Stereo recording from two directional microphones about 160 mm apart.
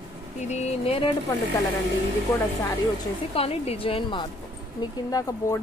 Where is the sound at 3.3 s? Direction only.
40° left (ahead or behind).